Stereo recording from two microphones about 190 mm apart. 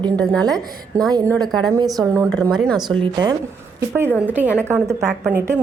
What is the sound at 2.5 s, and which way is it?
Speech, 5° left (ahead or behind).